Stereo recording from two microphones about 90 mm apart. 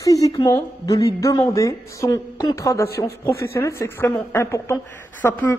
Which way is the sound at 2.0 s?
50° left (ahead or behind).